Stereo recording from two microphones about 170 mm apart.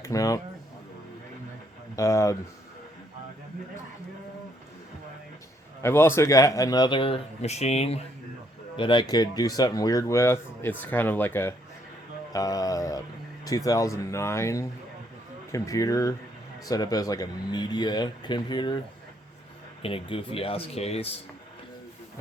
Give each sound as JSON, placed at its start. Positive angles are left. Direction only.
{"t": 0.0, "sound": "speech", "side_deg": 20}
{"t": 2.0, "sound": "speech", "side_deg": 20}
{"t": 5.8, "sound": "speech", "side_deg": 15}
{"t": 19.8, "sound": "speech", "side_deg": 35}